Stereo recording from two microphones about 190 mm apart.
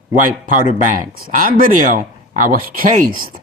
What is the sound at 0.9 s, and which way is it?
Speech, 45° right (ahead or behind).